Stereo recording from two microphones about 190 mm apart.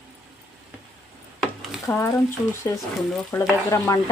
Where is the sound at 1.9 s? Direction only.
15° left (ahead or behind).